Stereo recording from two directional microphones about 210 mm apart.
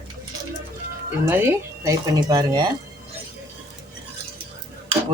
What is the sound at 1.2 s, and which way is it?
Speech, 10° right (ahead or behind).